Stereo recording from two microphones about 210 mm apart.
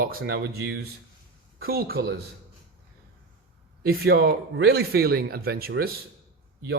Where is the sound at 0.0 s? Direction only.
45° right (ahead or behind).